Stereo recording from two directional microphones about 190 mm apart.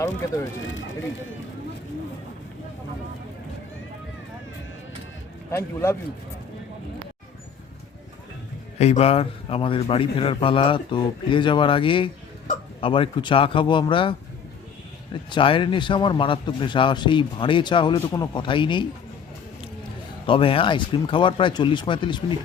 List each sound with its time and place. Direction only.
5.5 s a man's voice: 10° left (ahead or behind)
8.8 s speech: 35° left (ahead or behind)
20.2 s speech: 30° left (ahead or behind)